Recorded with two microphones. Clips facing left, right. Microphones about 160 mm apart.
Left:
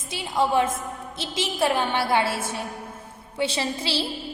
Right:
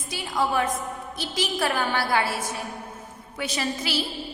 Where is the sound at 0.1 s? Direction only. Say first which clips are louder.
Left 3 dB; 25° left (ahead or behind).